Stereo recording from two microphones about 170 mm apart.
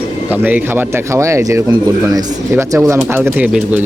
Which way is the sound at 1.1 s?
15° right (ahead or behind).